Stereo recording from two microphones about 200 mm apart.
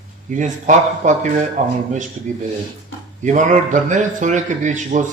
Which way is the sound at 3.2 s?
35° right (ahead or behind).